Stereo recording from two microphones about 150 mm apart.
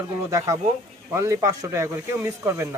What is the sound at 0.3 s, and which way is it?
Speech, 20° right (ahead or behind).